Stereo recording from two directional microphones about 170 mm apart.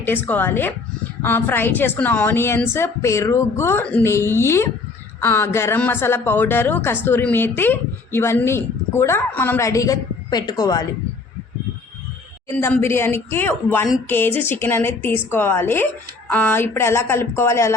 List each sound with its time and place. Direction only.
0.0 s speech: 10° left (ahead or behind)
12.5 s speech: 15° left (ahead or behind)